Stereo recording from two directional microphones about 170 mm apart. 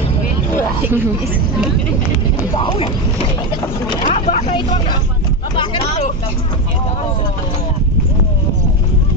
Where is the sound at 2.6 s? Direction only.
30° left (ahead or behind).